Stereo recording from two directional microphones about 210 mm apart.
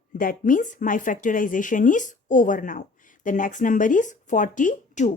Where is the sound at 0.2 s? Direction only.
40° left (ahead or behind).